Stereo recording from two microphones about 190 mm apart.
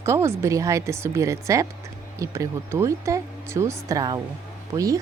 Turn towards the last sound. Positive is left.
turn(degrees=-15)  # may be behind; listen again after turning